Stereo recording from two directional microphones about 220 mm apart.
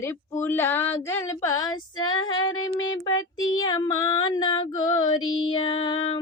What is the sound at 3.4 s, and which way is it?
Child singing, 65° left (ahead or behind).